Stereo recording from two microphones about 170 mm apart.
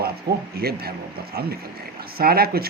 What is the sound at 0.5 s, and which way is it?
Speech, 65° right (ahead or behind).